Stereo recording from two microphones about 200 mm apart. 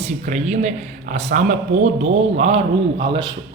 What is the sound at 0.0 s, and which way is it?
A man's voice, 35° right (ahead or behind).